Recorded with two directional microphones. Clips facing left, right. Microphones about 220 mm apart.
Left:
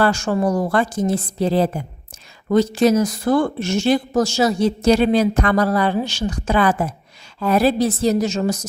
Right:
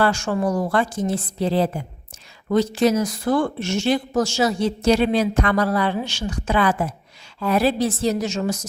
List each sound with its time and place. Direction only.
0.0 s a woman's voice: 40° left (ahead or behind)